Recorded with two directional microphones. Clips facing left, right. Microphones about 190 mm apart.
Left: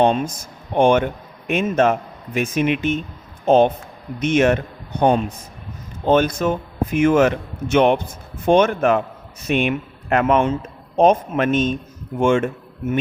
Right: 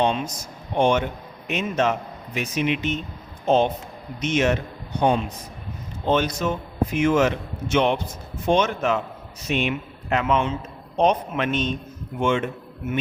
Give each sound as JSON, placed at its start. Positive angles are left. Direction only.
{"t": 0.0, "sound": "speech", "side_deg": 50}